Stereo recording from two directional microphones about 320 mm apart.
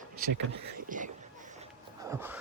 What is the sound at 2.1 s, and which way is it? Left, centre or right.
Speech, centre.